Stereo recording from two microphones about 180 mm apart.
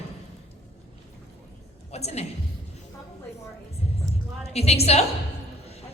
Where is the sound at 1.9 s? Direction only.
35° left (ahead or behind).